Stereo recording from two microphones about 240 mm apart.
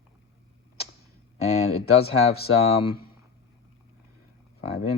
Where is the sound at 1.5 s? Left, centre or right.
Left.